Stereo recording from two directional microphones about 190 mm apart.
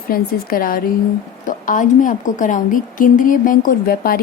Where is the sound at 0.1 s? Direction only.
50° left (ahead or behind).